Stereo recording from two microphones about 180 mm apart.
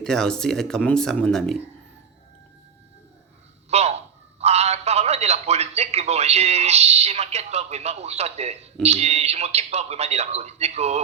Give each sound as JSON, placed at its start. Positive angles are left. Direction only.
{"t": 0.0, "sound": "speech", "side_deg": 5}
{"t": 3.7, "sound": "a man's voice", "side_deg": -35}